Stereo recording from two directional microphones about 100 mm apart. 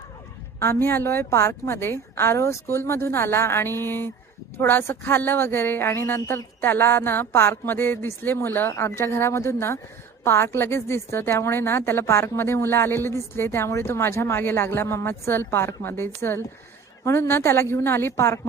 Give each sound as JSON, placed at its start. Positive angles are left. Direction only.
{"t": 0.6, "sound": "a woman's voice", "side_deg": 25}